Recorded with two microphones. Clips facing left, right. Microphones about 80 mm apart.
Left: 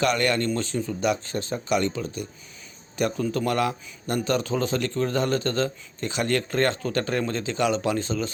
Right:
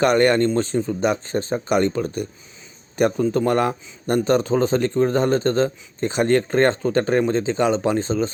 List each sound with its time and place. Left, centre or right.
0.0 s a man's voice: right
3.2 s a man's voice: right